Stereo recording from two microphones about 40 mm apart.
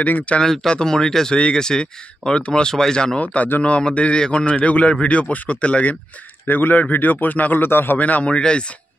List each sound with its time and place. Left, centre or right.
0.0 s speech: left
0.4 s speech: centre
2.7 s speech: centre
3.6 s speech: left
6.4 s a man's voice: left
7.6 s a man's voice: left
8.0 s speech: left